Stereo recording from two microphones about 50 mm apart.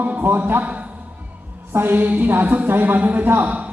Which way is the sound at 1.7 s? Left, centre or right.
Right.